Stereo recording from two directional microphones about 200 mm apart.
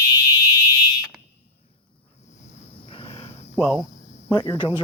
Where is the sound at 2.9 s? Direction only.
30° left (ahead or behind).